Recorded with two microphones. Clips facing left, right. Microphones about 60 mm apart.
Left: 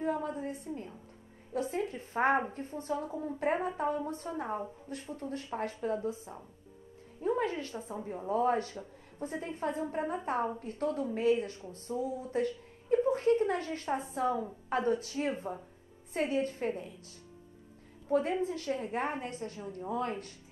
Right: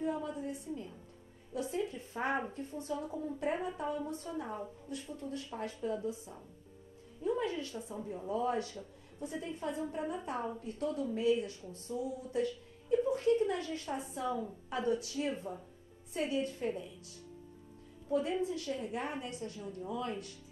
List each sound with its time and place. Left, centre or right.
0.0 s a sound: left
1.5 s speech: left
18.0 s speech: left